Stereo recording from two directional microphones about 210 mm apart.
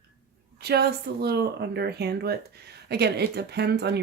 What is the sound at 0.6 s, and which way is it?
Speech, 50° right (ahead or behind).